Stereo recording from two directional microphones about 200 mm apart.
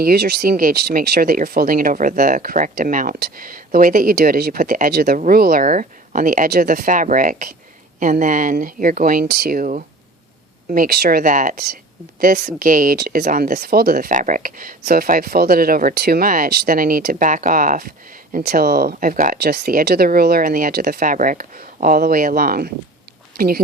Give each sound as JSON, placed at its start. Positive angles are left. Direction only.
{"t": 0.0, "sound": "speech", "side_deg": -50}